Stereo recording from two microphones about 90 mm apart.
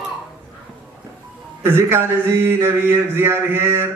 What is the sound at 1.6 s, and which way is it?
Speech, 25° right (ahead or behind).